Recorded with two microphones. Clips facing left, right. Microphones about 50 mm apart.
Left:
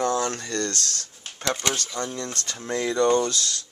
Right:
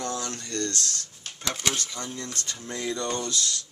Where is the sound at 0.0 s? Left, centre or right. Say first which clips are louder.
Left 8 dB; left.